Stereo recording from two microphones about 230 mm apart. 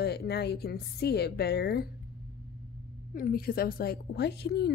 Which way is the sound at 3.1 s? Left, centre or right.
Left.